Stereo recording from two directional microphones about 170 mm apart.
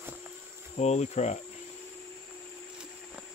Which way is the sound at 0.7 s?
40° left (ahead or behind).